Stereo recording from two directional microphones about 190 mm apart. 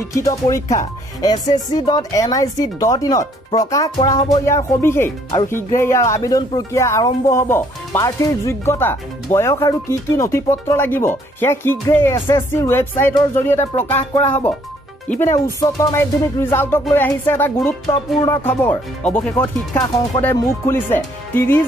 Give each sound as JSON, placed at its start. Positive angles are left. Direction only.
{"t": 0.1, "sound": "speech", "side_deg": 15}
{"t": 17.8, "sound": "speech", "side_deg": 25}
{"t": 18.4, "sound": "speech", "side_deg": 10}